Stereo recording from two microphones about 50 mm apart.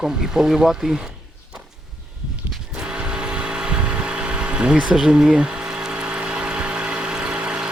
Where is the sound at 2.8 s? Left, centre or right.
Centre.